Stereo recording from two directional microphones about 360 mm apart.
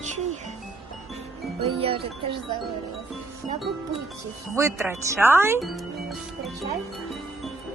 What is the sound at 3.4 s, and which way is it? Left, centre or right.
A woman's voice, centre.